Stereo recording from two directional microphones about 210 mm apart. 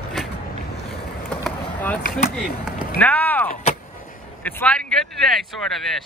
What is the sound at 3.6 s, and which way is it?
Vehicle, 40° left (ahead or behind).